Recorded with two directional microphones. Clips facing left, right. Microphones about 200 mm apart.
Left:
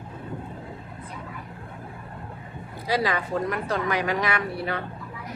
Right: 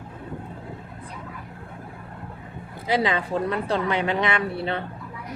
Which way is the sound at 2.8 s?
25° right (ahead or behind).